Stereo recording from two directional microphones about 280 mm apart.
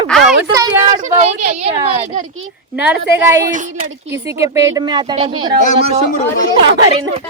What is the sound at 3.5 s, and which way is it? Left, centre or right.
Speech, right.